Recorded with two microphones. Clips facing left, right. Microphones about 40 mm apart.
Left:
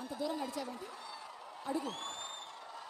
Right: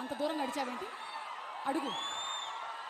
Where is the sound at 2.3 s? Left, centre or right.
Right.